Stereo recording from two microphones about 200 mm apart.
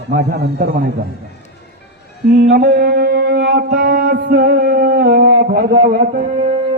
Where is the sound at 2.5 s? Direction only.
55° right (ahead or behind).